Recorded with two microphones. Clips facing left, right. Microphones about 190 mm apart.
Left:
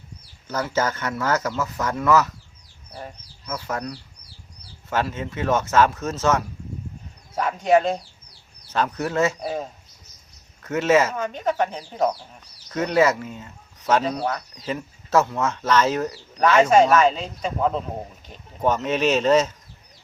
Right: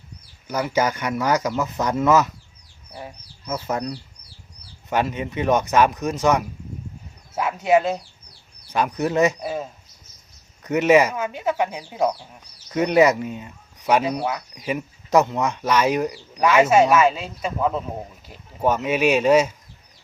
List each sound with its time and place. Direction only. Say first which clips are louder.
0.4 s speech: right 2 dB; 15° right (ahead or behind)
3.4 s speech: right 3 dB; 20° right (ahead or behind)
9.4 s speech: even; 5° right (ahead or behind)
10.6 s speech: right 3 dB; 15° right (ahead or behind)